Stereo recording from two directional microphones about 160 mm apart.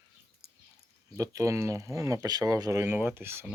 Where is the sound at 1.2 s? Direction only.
20° right (ahead or behind).